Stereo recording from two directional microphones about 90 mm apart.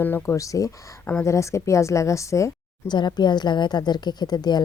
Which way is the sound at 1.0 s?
25° left (ahead or behind).